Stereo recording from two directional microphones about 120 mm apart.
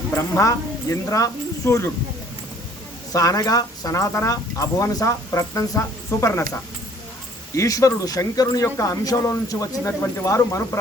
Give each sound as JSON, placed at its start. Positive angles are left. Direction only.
{"t": 0.2, "sound": "speech", "side_deg": 25}
{"t": 3.1, "sound": "speech", "side_deg": 30}